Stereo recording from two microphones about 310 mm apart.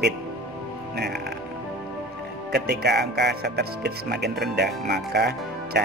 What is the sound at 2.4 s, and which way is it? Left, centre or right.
Speech, right.